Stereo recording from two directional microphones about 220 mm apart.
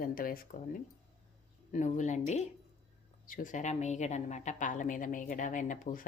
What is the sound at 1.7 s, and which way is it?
Speech, 35° left (ahead or behind).